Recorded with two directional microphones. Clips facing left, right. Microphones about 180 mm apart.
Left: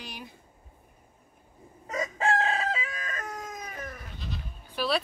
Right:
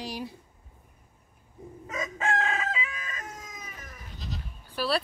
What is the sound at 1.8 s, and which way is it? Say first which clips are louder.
Chicken: left 3 dB; 35° left (ahead or behind).